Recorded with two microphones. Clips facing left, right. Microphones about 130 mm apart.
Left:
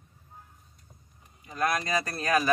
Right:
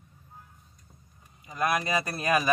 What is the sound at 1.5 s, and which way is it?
Speech, 15° right (ahead or behind).